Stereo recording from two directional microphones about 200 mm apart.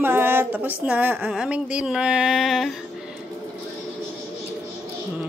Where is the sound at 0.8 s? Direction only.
10° right (ahead or behind).